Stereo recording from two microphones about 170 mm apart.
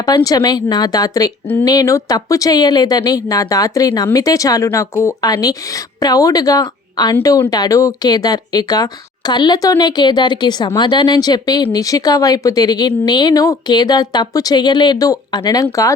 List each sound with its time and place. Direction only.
0.0 s speech: 20° left (ahead or behind)